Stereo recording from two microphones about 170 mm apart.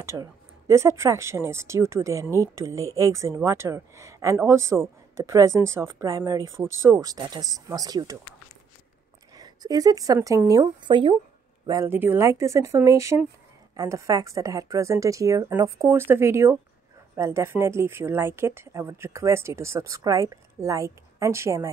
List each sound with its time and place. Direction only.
0.0 s speech: 15° right (ahead or behind)
9.3 s speech: 20° right (ahead or behind)